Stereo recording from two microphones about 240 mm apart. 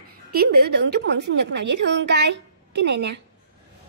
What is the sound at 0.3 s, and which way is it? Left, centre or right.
A woman's voice, right.